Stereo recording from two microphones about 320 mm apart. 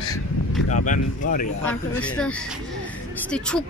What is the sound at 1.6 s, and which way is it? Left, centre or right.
Speech, centre.